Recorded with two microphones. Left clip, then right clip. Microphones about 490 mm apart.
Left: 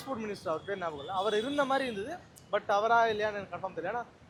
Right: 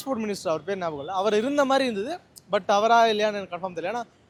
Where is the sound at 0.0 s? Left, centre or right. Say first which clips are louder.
Right 8 dB; right.